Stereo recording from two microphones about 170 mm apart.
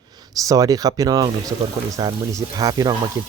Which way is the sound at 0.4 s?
20° right (ahead or behind).